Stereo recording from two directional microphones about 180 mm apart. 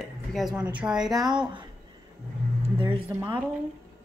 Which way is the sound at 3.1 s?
15° right (ahead or behind).